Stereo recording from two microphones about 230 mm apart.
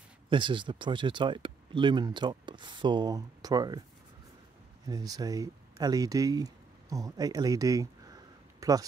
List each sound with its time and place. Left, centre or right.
0.3 s speech: right
4.8 s speech: centre